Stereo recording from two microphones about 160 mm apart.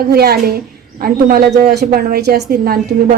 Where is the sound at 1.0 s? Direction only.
70° right (ahead or behind).